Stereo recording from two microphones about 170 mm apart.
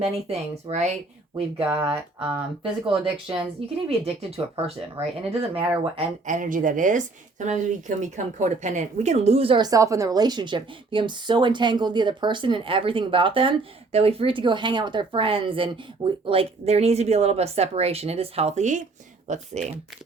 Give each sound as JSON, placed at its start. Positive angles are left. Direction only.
{"t": 0.0, "sound": "a woman's voice", "side_deg": -40}
{"t": 1.6, "sound": "speech", "side_deg": -5}
{"t": 2.8, "sound": "a woman's voice", "side_deg": -30}
{"t": 6.0, "sound": "a woman's voice", "side_deg": -50}